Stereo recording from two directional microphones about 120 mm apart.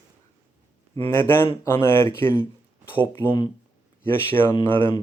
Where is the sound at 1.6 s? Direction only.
20° left (ahead or behind).